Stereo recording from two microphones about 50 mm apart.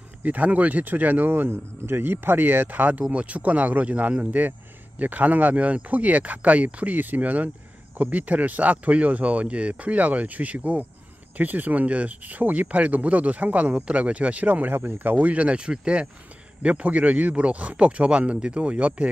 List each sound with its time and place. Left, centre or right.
0.2 s speech: right